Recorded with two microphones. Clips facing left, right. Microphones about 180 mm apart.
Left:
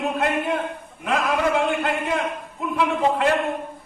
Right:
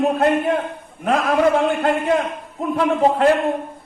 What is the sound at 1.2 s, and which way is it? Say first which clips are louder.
A man's voice: right 5 dB; 40° right (ahead or behind).